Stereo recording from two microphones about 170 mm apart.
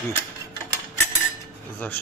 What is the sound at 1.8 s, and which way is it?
Speech, 10° left (ahead or behind).